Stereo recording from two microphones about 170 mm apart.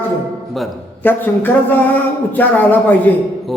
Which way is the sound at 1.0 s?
10° left (ahead or behind).